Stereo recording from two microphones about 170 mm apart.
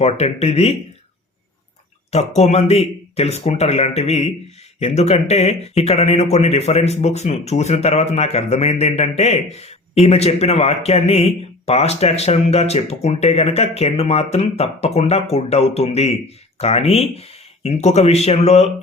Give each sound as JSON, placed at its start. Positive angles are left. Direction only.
{"t": 0.0, "sound": "speech", "side_deg": 40}
{"t": 2.0, "sound": "speech", "side_deg": 40}